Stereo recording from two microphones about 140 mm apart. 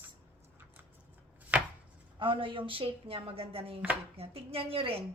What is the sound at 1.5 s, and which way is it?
Chopping, 10° right (ahead or behind).